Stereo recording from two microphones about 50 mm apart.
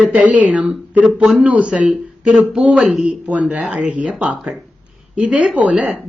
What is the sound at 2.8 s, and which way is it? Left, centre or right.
Speech, centre.